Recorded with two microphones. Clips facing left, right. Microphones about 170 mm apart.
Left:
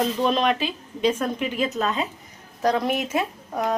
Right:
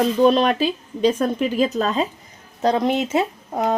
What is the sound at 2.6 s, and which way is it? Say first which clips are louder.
Speech: right 3 dB; 25° right (ahead or behind).